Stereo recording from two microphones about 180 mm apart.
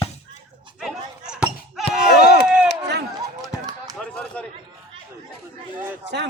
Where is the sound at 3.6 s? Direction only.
20° right (ahead or behind).